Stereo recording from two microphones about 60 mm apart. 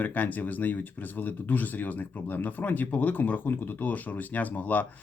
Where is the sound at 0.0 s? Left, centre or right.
Left.